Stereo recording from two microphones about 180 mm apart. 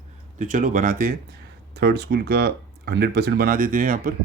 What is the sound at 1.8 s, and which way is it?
Speech, 65° right (ahead or behind).